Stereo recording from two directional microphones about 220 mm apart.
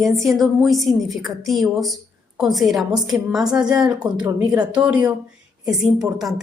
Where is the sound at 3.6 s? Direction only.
20° right (ahead or behind).